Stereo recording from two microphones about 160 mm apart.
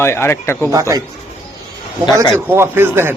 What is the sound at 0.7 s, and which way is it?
Speech, 20° right (ahead or behind).